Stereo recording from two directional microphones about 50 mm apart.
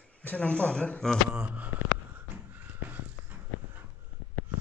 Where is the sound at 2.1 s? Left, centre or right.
Right.